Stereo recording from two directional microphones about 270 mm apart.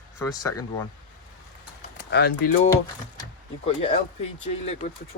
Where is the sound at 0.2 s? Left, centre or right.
Centre.